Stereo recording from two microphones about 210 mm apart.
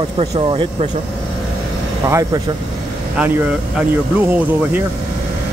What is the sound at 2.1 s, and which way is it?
Speech, 15° right (ahead or behind).